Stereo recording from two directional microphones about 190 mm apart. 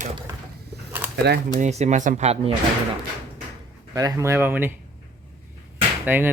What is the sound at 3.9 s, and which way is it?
Speech, 15° right (ahead or behind).